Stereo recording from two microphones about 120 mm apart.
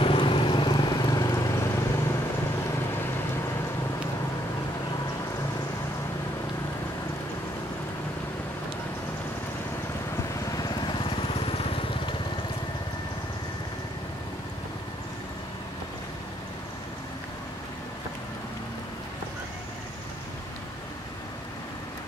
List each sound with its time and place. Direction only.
0.0 s vehicle: 45° left (ahead or behind); by 2.1 s 25° left (ahead or behind)
10.5 s vehicle: 35° left (ahead or behind); by 12.2 s 50° left (ahead or behind)